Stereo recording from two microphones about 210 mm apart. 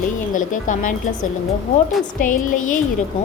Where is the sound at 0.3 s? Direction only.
40° left (ahead or behind).